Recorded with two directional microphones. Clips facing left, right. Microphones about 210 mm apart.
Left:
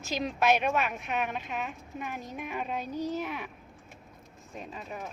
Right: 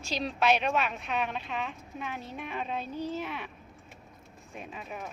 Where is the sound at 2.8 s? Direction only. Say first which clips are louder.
Left 2 dB; 40° left (ahead or behind).